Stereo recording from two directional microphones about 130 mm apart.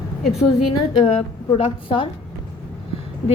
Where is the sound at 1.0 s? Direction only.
45° left (ahead or behind).